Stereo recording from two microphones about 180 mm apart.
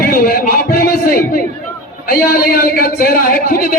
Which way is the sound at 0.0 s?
50° left (ahead or behind).